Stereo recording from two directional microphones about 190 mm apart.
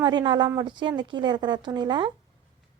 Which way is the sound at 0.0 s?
25° right (ahead or behind).